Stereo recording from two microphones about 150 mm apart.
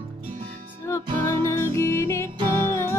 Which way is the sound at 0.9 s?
20° left (ahead or behind).